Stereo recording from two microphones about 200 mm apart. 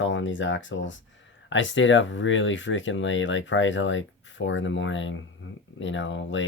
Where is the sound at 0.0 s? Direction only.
70° left (ahead or behind).